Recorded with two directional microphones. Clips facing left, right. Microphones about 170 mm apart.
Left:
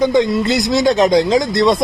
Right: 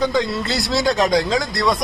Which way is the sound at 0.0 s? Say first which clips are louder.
Left 6 dB; 20° left (ahead or behind).